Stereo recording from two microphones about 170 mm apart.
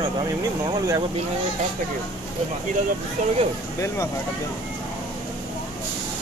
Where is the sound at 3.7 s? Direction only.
15° left (ahead or behind).